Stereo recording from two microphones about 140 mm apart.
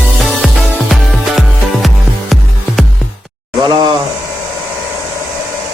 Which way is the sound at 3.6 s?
30° right (ahead or behind).